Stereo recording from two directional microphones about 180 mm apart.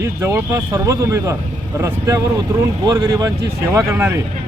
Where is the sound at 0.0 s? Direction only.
15° right (ahead or behind).